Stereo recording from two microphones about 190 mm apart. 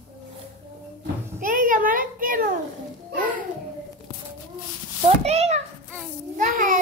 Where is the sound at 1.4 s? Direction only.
45° right (ahead or behind).